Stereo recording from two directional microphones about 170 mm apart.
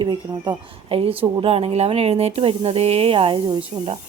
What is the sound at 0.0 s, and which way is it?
A woman's voice, 25° right (ahead or behind).